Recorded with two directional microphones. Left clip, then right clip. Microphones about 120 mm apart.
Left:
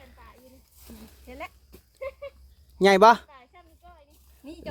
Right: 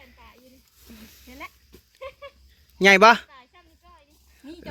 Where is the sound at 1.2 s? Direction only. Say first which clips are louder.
Left 1 dB; 10° left (ahead or behind).